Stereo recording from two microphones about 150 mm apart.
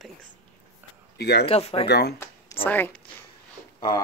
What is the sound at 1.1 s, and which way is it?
Speech, 90° left.